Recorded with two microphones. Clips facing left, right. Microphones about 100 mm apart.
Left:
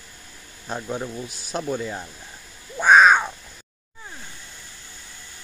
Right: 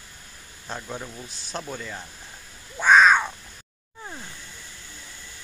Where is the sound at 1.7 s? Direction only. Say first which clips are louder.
Left 7 dB; 20° left (ahead or behind).